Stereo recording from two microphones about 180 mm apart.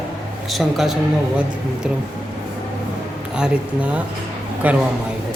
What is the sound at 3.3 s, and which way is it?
A man's voice, 5° right (ahead or behind).